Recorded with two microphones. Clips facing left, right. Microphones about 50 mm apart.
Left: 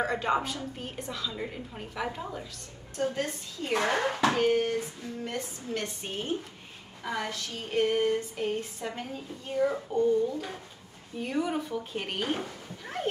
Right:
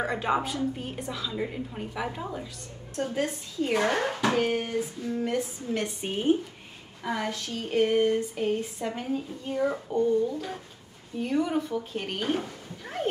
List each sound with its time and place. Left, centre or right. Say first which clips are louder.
0.0 s a woman's voice: right 1 dB; centre
11.1 s a woman's voice: right 3 dB; centre